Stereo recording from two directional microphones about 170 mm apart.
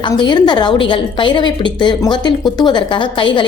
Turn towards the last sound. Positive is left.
turn(degrees=30)  # may be behind; listen again after turning